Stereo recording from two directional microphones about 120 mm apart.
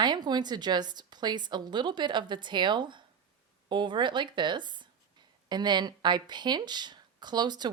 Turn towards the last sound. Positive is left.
turn(degrees=-35)  # may be behind; listen again after turning